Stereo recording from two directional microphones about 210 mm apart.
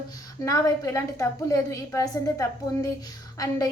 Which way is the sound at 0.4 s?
15° left (ahead or behind).